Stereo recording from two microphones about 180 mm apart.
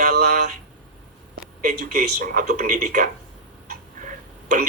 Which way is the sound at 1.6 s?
45° right (ahead or behind).